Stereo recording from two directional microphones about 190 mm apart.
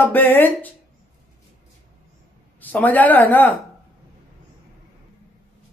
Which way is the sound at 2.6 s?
10° left (ahead or behind).